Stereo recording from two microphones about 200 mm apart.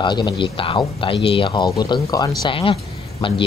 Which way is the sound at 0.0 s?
20° left (ahead or behind).